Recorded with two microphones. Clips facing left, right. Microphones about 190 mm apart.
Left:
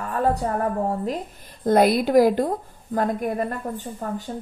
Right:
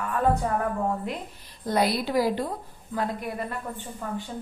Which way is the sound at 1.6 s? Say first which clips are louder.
Left 7 dB; 50° left (ahead or behind).